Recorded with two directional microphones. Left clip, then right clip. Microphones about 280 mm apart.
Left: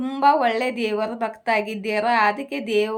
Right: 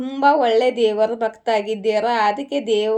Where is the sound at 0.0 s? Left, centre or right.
Centre.